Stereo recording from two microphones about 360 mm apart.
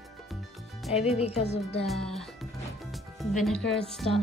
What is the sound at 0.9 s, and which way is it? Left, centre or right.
Speech, centre.